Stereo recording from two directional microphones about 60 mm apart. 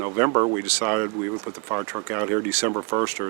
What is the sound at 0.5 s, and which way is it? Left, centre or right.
Speech, right.